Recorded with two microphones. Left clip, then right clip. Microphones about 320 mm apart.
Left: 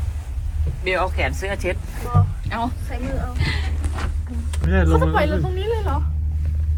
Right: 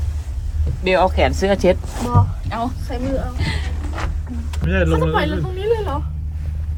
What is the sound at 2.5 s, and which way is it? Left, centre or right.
Speech, centre.